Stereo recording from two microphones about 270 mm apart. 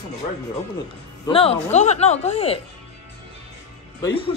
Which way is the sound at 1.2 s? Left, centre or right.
Left.